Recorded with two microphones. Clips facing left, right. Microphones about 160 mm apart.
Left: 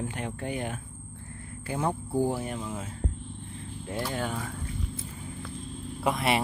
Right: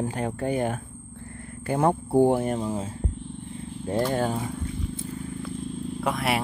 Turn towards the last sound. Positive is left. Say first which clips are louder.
# right 1 dB
turn(degrees=0)  # may be behind; listen again after turning